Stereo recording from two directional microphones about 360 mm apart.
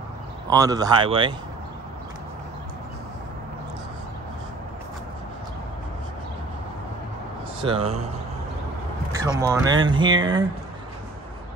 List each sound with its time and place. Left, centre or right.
0.5 s speech: centre
7.6 s speech: centre
9.2 s speech: centre